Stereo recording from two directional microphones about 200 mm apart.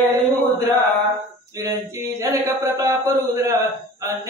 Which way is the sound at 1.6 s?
15° right (ahead or behind).